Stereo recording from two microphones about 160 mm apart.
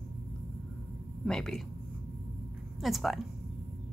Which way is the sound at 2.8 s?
Centre (ahead or behind).